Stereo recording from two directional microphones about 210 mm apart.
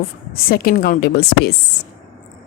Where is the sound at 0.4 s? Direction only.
45° left (ahead or behind).